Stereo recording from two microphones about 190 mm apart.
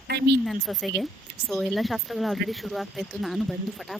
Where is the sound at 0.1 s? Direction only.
60° right (ahead or behind).